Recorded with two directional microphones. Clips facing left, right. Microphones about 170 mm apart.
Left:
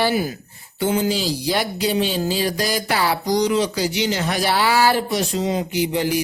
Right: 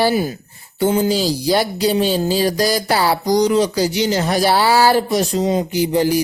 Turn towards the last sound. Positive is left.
turn(degrees=-40)  # may be behind; listen again after turning